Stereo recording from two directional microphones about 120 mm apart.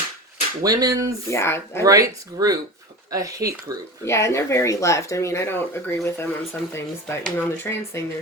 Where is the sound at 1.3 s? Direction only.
20° left (ahead or behind).